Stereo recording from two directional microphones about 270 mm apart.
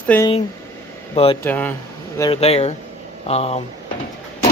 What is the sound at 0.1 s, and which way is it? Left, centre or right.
Speech, centre.